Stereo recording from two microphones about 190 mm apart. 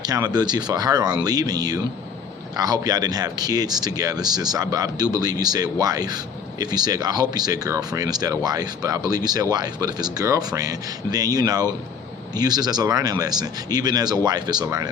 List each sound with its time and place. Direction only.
0.0 s speech: 20° right (ahead or behind)